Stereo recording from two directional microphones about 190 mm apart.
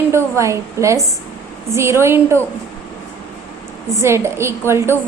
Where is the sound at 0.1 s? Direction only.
15° right (ahead or behind).